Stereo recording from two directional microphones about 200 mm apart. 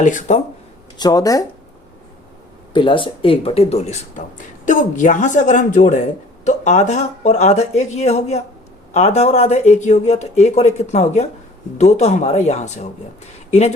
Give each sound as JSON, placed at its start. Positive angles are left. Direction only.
{"t": 0.0, "sound": "speech", "side_deg": 40}
{"t": 0.9, "sound": "speech", "side_deg": 20}
{"t": 2.7, "sound": "speech", "side_deg": 25}